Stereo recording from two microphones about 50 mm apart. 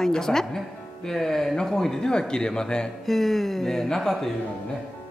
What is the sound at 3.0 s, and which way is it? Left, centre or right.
Speech, centre.